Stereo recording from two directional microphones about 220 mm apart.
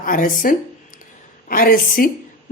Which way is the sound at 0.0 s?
40° left (ahead or behind).